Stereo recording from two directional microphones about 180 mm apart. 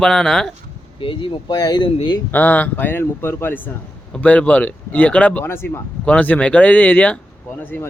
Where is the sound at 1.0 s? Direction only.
25° left (ahead or behind).